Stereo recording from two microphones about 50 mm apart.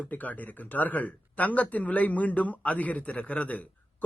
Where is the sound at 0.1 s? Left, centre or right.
Left.